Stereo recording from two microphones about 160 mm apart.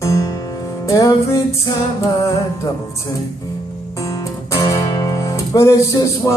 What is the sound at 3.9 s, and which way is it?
Guitar, 20° left (ahead or behind).